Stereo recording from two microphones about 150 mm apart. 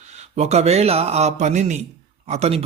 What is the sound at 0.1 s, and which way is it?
Speech, 50° right (ahead or behind).